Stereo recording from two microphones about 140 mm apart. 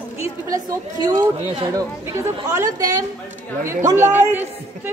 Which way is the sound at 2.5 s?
25° right (ahead or behind).